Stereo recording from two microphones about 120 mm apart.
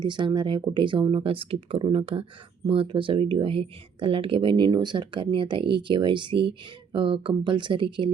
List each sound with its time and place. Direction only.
0.0 s speech: 40° right (ahead or behind)